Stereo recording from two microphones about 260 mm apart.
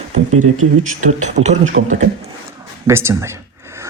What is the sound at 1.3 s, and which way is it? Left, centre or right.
Speech, right.